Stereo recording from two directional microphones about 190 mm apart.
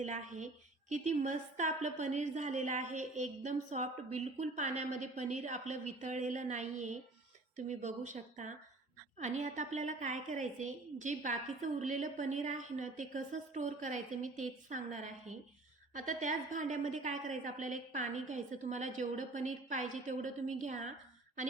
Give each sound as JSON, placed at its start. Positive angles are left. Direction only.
{"t": 0.0, "sound": "a woman's voice", "side_deg": -40}